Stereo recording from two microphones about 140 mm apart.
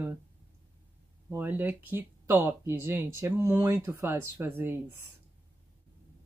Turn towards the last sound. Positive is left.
turn(degrees=-15)  # may be behind; listen again after turning